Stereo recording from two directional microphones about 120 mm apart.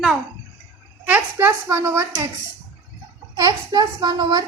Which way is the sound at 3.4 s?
30° right (ahead or behind).